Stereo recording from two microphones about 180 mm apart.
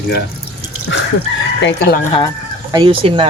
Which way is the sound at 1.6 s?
60° left (ahead or behind).